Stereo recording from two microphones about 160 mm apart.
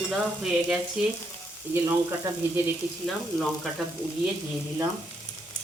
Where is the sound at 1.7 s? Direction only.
15° right (ahead or behind).